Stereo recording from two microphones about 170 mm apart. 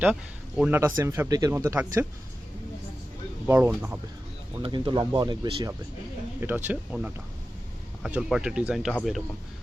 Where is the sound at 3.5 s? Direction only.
15° right (ahead or behind).